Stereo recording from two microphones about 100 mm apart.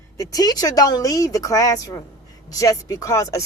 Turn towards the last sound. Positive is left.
turn(degrees=30)  # may be behind; listen again after turning